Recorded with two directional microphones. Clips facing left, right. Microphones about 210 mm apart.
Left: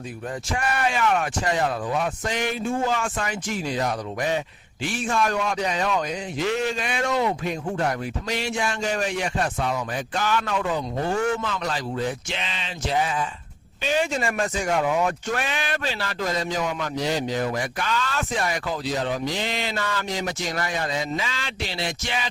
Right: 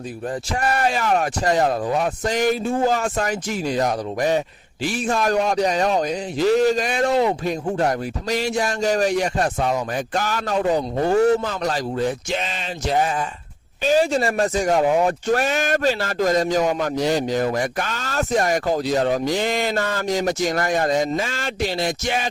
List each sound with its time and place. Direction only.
0.5 s speech: 40° right (ahead or behind)